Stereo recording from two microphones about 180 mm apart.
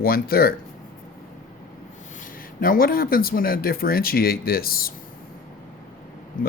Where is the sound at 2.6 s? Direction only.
55° left (ahead or behind).